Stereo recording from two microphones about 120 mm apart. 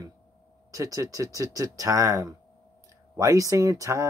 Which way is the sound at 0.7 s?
30° right (ahead or behind).